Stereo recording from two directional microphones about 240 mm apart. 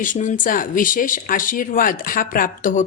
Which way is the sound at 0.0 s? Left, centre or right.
Left.